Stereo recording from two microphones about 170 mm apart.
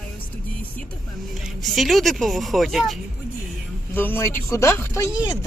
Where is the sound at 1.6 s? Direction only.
Centre (ahead or behind).